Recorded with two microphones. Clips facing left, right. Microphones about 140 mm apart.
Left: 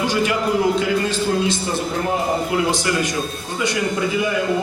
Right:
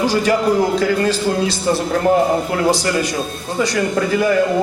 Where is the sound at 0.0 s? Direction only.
35° right (ahead or behind).